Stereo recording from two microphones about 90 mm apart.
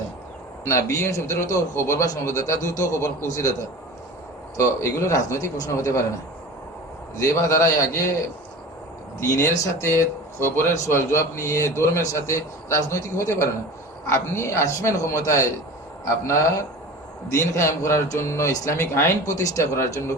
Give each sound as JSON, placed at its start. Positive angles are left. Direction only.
{"t": 0.7, "sound": "a man's voice", "side_deg": 35}
{"t": 4.5, "sound": "a man's voice", "side_deg": 35}
{"t": 7.2, "sound": "a man's voice", "side_deg": 35}
{"t": 9.2, "sound": "a man's voice", "side_deg": 30}